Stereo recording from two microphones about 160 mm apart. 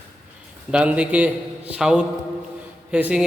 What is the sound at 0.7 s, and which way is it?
A man's voice, 5° right (ahead or behind).